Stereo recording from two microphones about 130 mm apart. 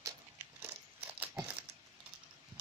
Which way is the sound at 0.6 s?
10° right (ahead or behind).